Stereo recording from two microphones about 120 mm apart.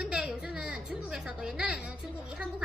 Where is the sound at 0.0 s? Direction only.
5° right (ahead or behind).